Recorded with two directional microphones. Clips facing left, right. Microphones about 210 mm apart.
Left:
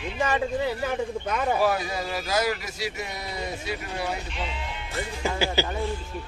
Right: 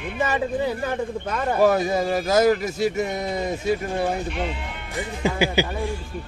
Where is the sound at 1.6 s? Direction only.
45° right (ahead or behind).